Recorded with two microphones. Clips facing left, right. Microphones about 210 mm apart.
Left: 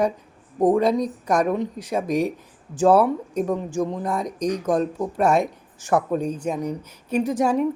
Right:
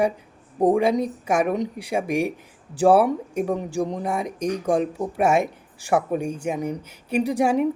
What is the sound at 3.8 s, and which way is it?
Speech, 40° right (ahead or behind).